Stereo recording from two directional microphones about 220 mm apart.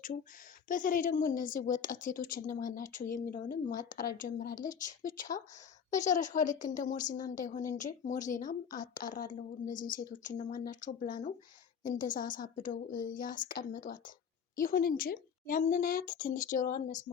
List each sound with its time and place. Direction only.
0.7 s a woman's voice: 35° left (ahead or behind)